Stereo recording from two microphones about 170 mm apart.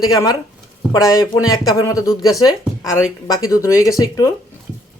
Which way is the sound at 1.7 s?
20° left (ahead or behind).